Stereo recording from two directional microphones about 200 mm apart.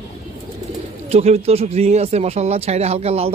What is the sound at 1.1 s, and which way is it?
Speech, 30° right (ahead or behind).